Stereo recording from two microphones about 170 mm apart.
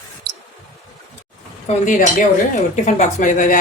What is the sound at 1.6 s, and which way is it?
A woman's voice, 50° left (ahead or behind).